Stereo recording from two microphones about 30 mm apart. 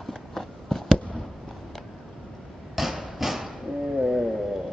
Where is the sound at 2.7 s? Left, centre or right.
Centre.